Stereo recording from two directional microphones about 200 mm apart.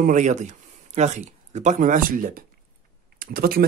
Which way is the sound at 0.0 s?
35° right (ahead or behind).